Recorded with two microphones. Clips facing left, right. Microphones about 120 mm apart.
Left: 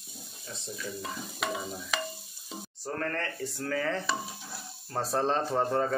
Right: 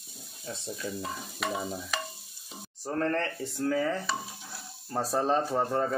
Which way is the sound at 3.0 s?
25° right (ahead or behind).